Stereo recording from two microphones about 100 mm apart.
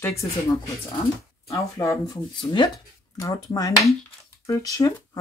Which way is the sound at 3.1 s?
35° left (ahead or behind).